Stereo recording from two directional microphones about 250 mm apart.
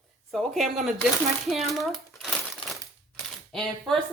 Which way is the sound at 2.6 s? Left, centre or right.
Left.